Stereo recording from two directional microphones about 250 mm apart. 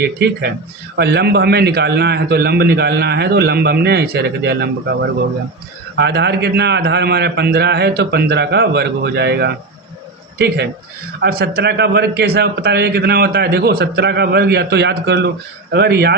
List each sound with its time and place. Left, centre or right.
0.0 s a man's voice: right
6.0 s a man's voice: right